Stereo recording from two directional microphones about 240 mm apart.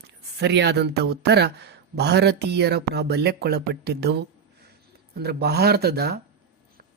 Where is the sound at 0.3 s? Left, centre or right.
Right.